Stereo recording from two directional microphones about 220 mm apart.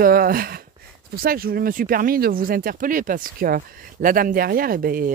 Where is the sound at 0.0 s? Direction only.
40° right (ahead or behind).